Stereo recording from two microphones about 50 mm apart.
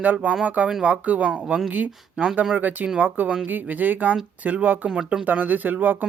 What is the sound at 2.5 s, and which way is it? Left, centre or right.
Speech, right.